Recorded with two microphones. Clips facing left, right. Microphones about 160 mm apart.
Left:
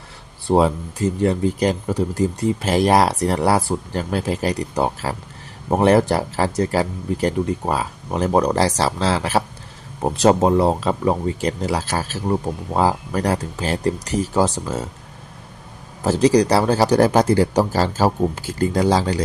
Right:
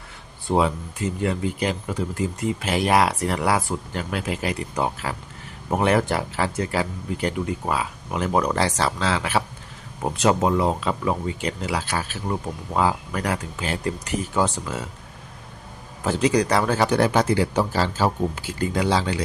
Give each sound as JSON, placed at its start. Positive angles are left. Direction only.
{"t": 0.4, "sound": "speech", "side_deg": 35}
{"t": 16.0, "sound": "speech", "side_deg": 35}